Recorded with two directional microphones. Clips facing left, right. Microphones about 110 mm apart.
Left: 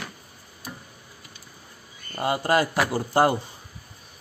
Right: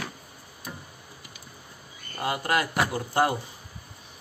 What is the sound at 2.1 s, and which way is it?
Speech, 25° left (ahead or behind).